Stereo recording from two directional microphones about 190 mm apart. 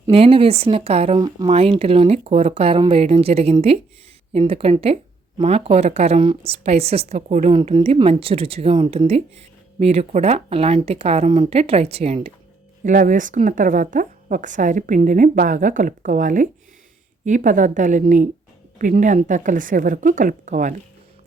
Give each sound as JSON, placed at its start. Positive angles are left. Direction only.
{"t": 0.1, "sound": "a woman's voice", "side_deg": -30}
{"t": 12.8, "sound": "a woman's voice", "side_deg": -45}